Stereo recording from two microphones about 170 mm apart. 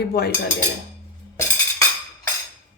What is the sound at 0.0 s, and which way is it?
Speech, 70° left (ahead or behind).